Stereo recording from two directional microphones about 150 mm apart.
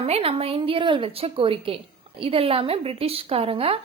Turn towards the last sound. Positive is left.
turn(degrees=-40)  # may be behind; listen again after turning